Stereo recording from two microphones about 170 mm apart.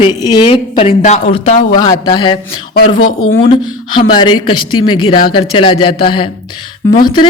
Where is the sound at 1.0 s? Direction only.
40° left (ahead or behind).